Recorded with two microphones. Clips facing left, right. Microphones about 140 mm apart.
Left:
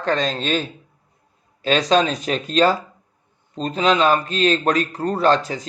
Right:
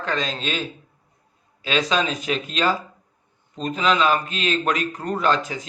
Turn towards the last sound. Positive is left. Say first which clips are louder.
# left 4 dB
turn(degrees=35)  # may be behind; listen again after turning